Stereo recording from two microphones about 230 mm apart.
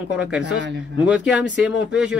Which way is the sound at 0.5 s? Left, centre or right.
Right.